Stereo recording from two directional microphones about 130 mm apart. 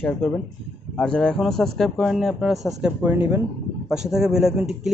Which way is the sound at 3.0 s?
15° right (ahead or behind).